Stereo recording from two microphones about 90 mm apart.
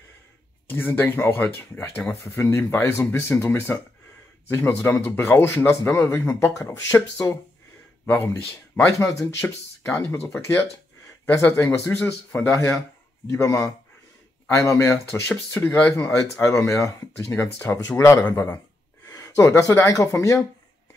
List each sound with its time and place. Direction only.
0.7 s a man's voice: 25° left (ahead or behind)
13.3 s speech: 35° left (ahead or behind)